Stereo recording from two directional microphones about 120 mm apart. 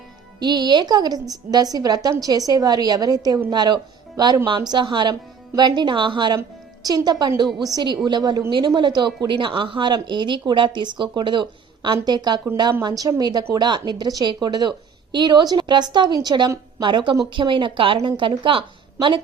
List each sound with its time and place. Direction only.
0.3 s speech: 35° right (ahead or behind)